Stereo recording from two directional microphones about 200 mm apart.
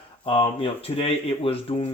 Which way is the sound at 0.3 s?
25° left (ahead or behind).